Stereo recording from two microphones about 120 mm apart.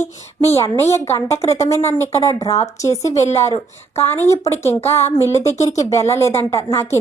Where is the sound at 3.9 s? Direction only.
20° left (ahead or behind).